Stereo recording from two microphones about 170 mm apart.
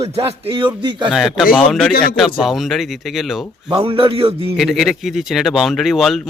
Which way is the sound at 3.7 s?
35° right (ahead or behind).